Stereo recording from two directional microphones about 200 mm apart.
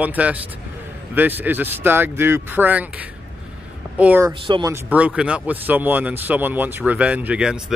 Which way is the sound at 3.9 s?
10° right (ahead or behind).